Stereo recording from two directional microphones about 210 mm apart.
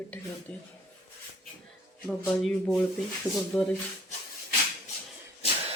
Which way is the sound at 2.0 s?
5° left (ahead or behind).